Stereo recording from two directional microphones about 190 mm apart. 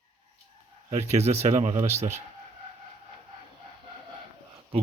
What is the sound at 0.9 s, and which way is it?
Speech, 35° right (ahead or behind).